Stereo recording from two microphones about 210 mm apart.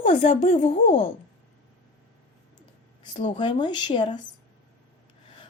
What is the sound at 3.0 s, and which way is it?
A woman's voice, 20° left (ahead or behind).